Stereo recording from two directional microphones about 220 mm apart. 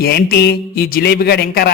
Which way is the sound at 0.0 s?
45° left (ahead or behind).